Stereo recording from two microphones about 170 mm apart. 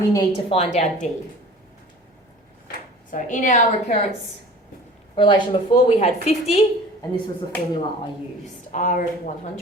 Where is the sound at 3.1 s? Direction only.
50° left (ahead or behind).